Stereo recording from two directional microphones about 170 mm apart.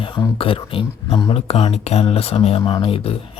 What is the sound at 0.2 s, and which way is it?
Speech, 30° left (ahead or behind).